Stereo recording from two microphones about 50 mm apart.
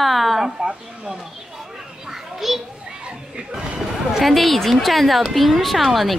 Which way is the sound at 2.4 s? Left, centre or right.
Centre.